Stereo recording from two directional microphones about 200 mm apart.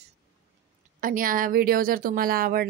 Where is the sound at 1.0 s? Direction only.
45° right (ahead or behind).